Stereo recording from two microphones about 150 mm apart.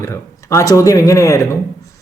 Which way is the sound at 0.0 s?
20° left (ahead or behind).